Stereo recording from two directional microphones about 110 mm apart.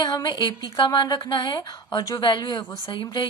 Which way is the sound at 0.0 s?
35° left (ahead or behind).